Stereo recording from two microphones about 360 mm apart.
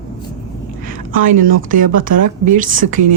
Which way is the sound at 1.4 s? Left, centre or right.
Right.